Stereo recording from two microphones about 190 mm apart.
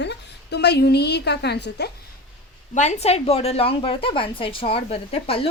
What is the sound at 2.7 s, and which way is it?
A woman's voice, 35° left (ahead or behind).